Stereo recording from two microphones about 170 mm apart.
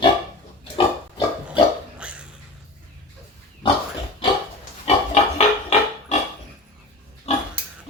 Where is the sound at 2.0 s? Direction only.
5° right (ahead or behind).